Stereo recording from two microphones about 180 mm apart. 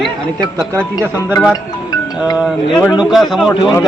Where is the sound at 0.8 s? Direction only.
10° right (ahead or behind).